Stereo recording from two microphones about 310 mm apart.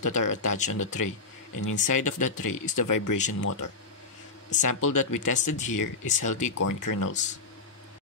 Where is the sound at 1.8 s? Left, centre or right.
Left.